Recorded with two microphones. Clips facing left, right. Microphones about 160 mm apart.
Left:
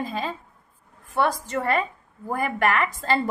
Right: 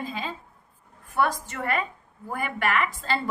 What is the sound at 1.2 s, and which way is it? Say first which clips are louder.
A woman's voice: left 2 dB; 30° left (ahead or behind).